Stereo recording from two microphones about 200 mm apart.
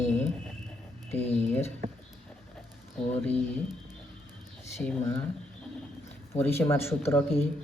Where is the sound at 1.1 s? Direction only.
10° left (ahead or behind).